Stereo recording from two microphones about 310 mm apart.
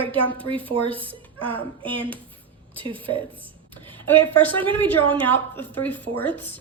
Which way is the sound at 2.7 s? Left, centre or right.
Centre.